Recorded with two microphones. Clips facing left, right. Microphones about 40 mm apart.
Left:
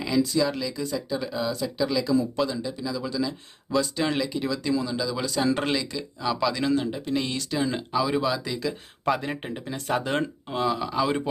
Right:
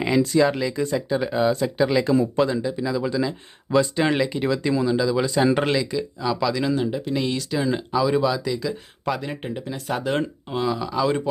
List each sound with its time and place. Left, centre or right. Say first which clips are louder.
0.0 s speech: right 5 dB; right; by 5.2 s centre
5.2 s speech: right 5 dB; right
5.6 s speech: right 5 dB; centre
6.2 s speech: right 1 dB; centre